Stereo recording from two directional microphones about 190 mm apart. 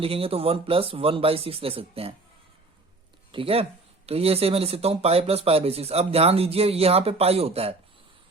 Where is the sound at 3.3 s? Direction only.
30° right (ahead or behind).